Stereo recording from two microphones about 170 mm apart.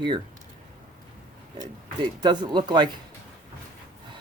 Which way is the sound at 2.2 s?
25° right (ahead or behind).